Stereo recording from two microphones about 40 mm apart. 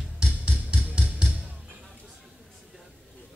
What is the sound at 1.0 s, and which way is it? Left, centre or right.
Music, right.